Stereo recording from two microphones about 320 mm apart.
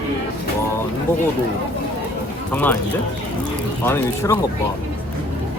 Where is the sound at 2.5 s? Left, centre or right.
Centre.